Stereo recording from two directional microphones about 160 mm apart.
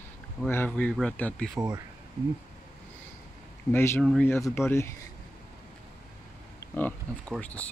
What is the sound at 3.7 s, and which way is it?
Speech, 15° left (ahead or behind).